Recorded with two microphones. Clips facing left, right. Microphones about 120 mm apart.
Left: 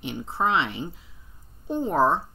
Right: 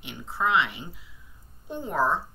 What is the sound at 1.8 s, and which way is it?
Speech, 30° left (ahead or behind).